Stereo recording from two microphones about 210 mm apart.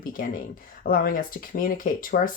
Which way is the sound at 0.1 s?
40° left (ahead or behind).